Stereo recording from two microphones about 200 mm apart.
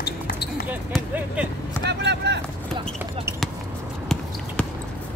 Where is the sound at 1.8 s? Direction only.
60° right (ahead or behind).